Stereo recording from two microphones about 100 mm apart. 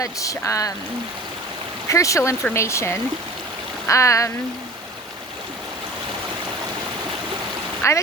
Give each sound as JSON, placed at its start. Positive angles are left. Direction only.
{"t": 0.0, "sound": "speech", "side_deg": 35}
{"t": 1.9, "sound": "speech", "side_deg": 30}
{"t": 7.8, "sound": "speech", "side_deg": 30}